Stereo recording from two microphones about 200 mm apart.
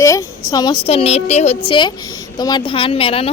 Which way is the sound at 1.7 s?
20° left (ahead or behind).